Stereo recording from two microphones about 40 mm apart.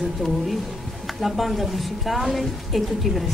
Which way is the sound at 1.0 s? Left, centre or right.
Centre.